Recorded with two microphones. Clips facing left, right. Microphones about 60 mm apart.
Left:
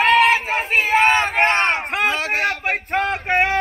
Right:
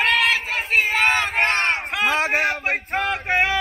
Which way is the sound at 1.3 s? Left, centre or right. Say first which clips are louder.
Left 3 dB; left.